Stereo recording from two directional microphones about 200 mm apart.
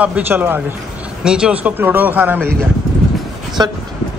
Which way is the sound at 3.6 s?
20° right (ahead or behind).